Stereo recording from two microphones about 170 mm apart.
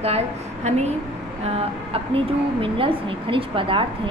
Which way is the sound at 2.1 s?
30° right (ahead or behind).